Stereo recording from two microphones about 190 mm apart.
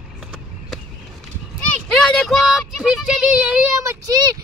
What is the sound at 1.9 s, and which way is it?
Speech, 5° left (ahead or behind).